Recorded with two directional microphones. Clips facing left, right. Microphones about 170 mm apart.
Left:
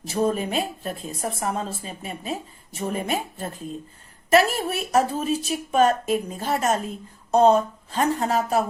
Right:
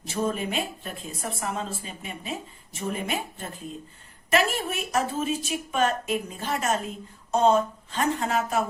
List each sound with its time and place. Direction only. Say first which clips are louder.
0.0 s a woman's voice: left 4 dB; 40° left (ahead or behind)